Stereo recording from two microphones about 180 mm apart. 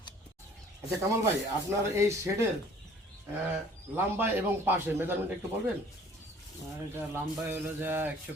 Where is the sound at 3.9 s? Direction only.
10° right (ahead or behind).